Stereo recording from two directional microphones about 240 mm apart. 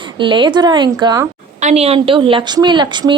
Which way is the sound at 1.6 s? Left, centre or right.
Right.